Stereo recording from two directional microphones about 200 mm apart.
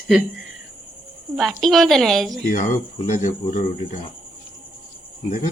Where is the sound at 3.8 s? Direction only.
25° left (ahead or behind).